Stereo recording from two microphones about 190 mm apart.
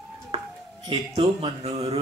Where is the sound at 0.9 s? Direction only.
30° right (ahead or behind).